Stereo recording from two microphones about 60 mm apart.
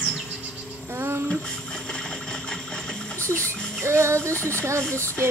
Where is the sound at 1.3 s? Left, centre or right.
Centre.